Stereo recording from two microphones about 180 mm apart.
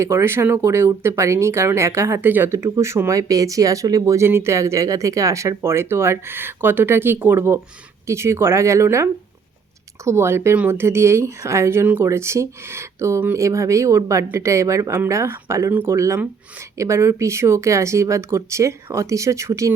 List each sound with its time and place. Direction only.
0.0 s speech: 15° right (ahead or behind)